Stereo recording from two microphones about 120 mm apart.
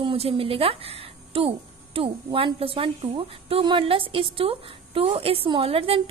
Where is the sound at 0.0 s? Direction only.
50° right (ahead or behind).